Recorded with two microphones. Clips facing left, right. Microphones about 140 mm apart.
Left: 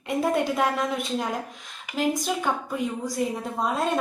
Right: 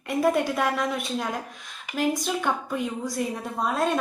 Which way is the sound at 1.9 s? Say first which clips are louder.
Even; 10° left (ahead or behind).